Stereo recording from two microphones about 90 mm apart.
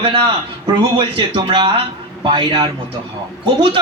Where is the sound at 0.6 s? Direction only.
70° right (ahead or behind).